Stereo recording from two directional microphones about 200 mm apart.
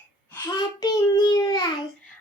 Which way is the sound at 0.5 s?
20° left (ahead or behind).